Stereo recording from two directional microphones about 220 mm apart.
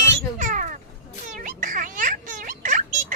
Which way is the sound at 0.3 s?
35° right (ahead or behind).